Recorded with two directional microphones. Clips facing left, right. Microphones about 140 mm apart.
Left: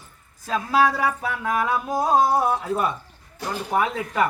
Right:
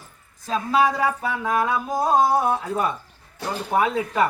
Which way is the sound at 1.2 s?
Centre (ahead or behind).